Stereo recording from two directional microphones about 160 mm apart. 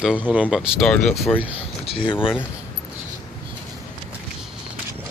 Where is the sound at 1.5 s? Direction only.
35° left (ahead or behind).